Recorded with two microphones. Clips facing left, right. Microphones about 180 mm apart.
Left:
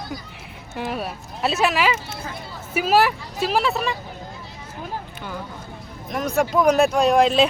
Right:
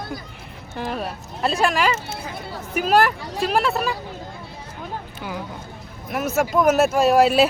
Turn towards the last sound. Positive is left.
turn(degrees=-5)  # may be behind; listen again after turning